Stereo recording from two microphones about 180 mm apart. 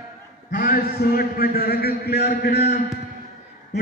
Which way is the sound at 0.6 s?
55° left (ahead or behind).